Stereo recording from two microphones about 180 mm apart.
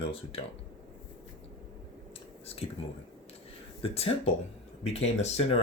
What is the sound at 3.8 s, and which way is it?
Speech, 30° left (ahead or behind).